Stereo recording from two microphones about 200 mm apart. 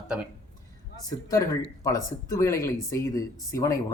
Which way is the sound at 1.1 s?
15° left (ahead or behind).